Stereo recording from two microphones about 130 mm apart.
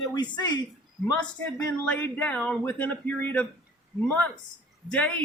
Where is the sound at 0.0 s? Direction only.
35° left (ahead or behind).